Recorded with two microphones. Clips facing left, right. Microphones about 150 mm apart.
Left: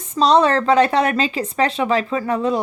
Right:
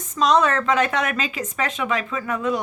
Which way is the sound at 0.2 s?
30° left (ahead or behind).